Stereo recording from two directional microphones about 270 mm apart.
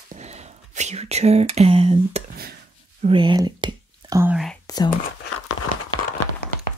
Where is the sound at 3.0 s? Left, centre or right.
Centre.